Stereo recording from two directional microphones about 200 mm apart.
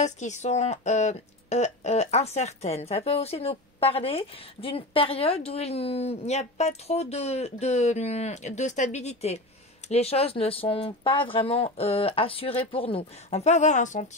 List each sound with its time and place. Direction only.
0.0 s speech: 35° left (ahead or behind)